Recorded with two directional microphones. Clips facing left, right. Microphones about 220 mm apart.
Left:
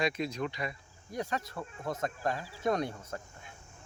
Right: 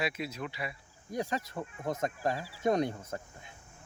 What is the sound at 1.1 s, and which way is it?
Speech, 20° right (ahead or behind).